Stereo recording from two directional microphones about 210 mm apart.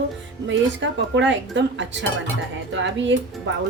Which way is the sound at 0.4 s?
60° right (ahead or behind).